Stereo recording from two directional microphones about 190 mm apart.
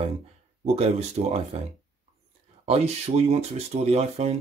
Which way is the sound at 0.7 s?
35° right (ahead or behind).